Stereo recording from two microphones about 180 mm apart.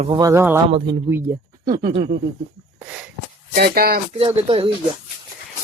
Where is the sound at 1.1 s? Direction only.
10° right (ahead or behind); by 2.1 s 30° right (ahead or behind).